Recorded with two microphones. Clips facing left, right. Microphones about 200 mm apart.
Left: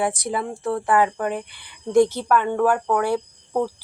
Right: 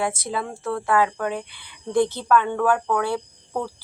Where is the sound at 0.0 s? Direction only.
15° left (ahead or behind).